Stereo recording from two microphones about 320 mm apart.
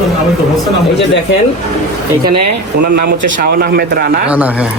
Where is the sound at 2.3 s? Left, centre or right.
Right.